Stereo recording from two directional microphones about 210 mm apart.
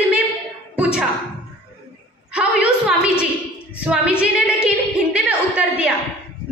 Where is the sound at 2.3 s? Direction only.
5° right (ahead or behind).